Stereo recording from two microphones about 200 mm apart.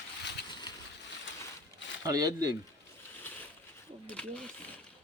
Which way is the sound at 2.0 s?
20° right (ahead or behind).